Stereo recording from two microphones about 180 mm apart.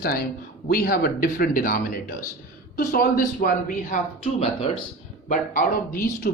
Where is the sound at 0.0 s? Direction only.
55° left (ahead or behind).